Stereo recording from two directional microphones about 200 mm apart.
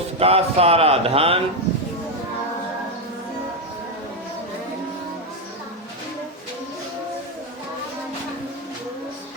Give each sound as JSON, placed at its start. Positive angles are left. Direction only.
{"t": 0.2, "sound": "speech", "side_deg": -30}